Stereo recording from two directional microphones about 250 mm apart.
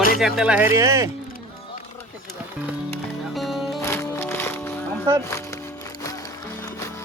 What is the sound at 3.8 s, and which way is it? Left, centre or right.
Music, centre.